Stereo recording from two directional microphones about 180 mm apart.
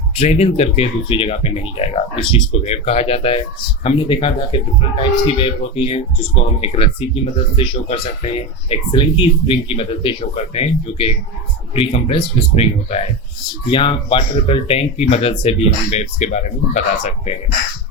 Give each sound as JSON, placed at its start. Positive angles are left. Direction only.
{"t": 0.2, "sound": "speech", "side_deg": 35}